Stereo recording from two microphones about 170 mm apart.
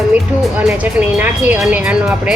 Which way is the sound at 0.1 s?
10° right (ahead or behind).